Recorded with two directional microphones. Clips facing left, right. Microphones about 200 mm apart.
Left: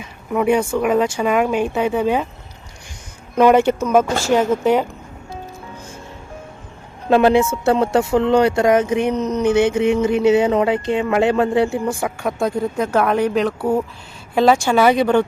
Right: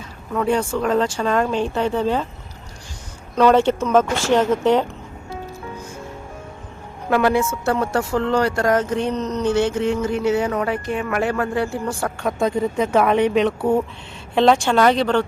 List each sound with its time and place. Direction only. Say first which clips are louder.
0.0 s speech: left 4 dB; 10° left (ahead or behind)
3.3 s speech: left 2 dB; 15° left (ahead or behind)
7.1 s speech: left 4 dB; 25° left (ahead or behind)
12.4 s speech: right 1 dB; centre (ahead or behind)